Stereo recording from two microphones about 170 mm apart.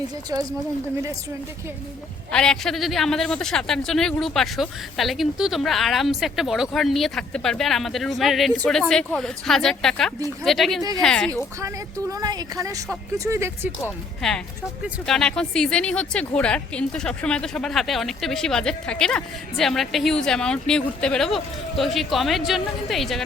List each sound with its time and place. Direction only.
0.3 s speech: 20° right (ahead or behind)
2.3 s speech: 5° left (ahead or behind)
11.6 s speech: 20° right (ahead or behind)
14.2 s speech: 5° left (ahead or behind)